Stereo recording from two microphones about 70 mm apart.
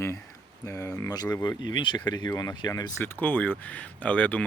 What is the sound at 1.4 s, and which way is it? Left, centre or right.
Speech, left.